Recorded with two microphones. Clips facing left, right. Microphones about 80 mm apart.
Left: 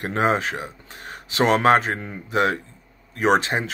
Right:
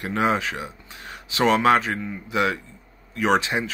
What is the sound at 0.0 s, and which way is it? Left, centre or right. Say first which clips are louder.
Speech: left 1 dB; left.